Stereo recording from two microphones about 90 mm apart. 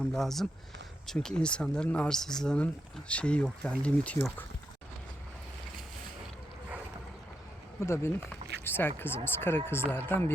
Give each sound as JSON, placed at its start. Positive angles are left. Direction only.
{"t": 0.1, "sound": "speech", "side_deg": 5}
{"t": 7.8, "sound": "speech", "side_deg": 30}